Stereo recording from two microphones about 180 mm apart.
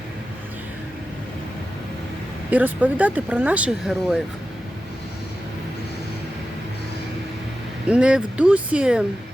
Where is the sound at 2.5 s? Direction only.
10° right (ahead or behind).